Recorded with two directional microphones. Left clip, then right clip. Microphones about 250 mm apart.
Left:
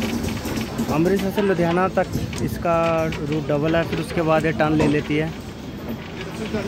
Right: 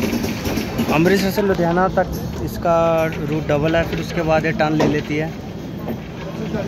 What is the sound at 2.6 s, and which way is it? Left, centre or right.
Speech, centre.